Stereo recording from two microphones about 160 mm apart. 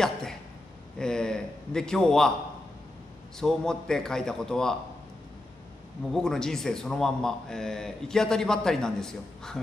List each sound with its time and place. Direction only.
0.0 s a sound: 5° left (ahead or behind)
0.9 s a man's voice: 5° left (ahead or behind)
3.3 s a man's voice: 5° left (ahead or behind)
6.1 s a man's voice: 5° left (ahead or behind)